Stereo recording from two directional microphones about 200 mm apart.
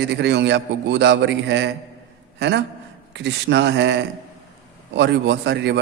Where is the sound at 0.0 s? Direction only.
60° right (ahead or behind).